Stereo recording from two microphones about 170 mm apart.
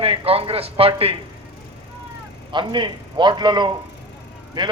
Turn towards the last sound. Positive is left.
turn(degrees=-25)  # may be behind; listen again after turning